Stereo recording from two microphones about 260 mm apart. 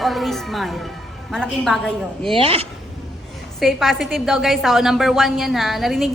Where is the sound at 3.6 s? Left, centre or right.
Centre.